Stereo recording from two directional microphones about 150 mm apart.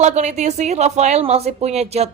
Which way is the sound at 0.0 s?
50° right (ahead or behind).